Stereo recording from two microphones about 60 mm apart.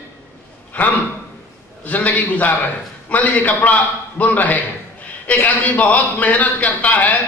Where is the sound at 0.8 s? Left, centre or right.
Left.